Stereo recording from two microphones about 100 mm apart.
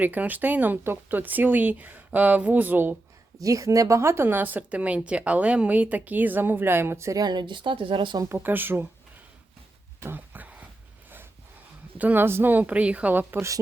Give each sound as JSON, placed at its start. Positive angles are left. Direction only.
{"t": 0.0, "sound": "speech", "side_deg": -15}
{"t": 3.3, "sound": "a woman's voice", "side_deg": -35}
{"t": 7.2, "sound": "speech", "side_deg": -45}
{"t": 8.4, "sound": "a woman's voice", "side_deg": -20}
{"t": 10.0, "sound": "a sound", "side_deg": -20}
{"t": 11.9, "sound": "speech", "side_deg": -20}